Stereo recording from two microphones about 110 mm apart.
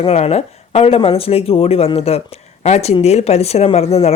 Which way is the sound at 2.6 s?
75° left (ahead or behind).